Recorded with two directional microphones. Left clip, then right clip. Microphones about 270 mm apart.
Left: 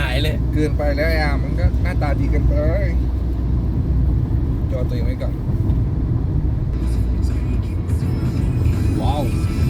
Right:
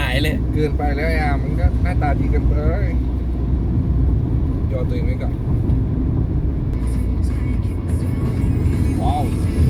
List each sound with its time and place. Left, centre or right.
0.1 s vehicle: centre
0.5 s speech: centre